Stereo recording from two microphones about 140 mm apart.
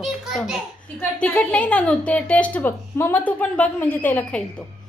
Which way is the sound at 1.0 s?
10° left (ahead or behind).